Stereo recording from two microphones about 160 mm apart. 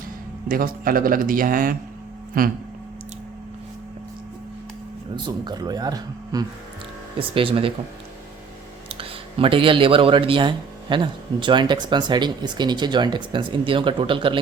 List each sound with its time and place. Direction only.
0.4 s a man's voice: 65° right (ahead or behind)
5.1 s a man's voice: 25° right (ahead or behind)
9.0 s speech: 35° right (ahead or behind)